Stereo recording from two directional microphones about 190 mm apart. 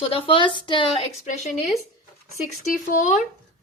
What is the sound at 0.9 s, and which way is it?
Speech, 40° left (ahead or behind).